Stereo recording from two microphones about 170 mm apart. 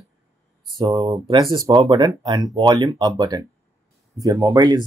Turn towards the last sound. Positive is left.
turn(degrees=-25)  # may be behind; listen again after turning